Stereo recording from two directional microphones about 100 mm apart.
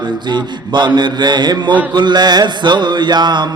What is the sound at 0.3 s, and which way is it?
Mantra, 50° right (ahead or behind).